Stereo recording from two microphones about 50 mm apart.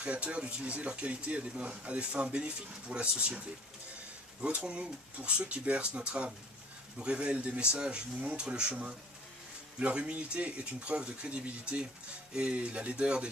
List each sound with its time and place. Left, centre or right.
0.0 s speech: right